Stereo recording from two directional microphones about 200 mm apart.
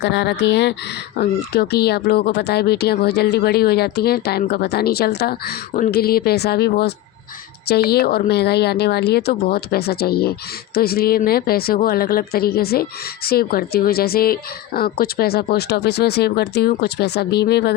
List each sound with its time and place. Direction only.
0.0 s speech: 60° left (ahead or behind)